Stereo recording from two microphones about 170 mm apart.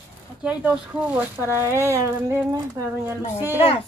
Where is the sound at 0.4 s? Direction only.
10° right (ahead or behind).